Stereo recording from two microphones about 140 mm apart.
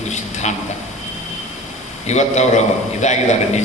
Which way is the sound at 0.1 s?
55° left (ahead or behind).